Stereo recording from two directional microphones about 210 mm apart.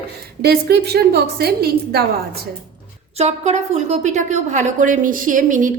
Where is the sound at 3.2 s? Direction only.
35° right (ahead or behind).